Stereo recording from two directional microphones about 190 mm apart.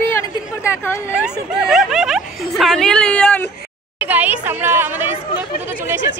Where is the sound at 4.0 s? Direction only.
10° right (ahead or behind).